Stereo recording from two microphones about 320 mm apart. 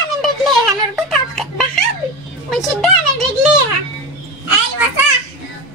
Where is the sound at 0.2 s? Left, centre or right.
Centre.